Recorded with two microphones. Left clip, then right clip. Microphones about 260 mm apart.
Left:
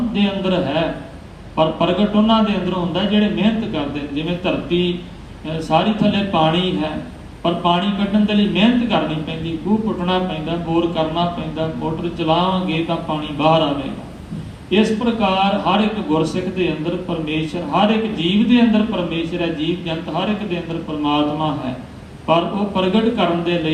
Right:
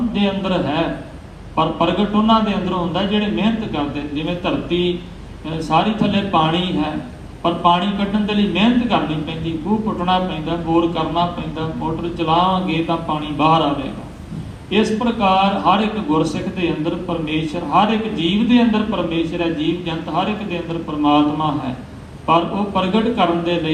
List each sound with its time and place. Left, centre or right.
0.1 s a man's voice: right
10.1 s a man's voice: right
14.7 s a man's voice: right